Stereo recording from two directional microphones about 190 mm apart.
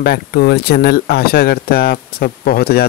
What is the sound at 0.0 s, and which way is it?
Speech, 55° left (ahead or behind).